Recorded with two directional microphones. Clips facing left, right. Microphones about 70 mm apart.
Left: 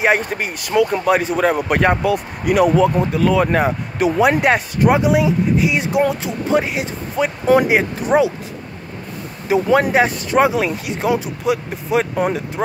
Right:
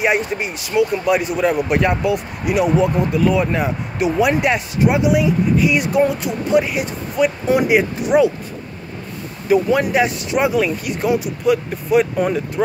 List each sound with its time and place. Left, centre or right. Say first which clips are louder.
0.0 s speech: left 1 dB; left
1.1 s speech: left 1 dB; left
5.1 s speech: even; left
9.7 s speech: left 2 dB; left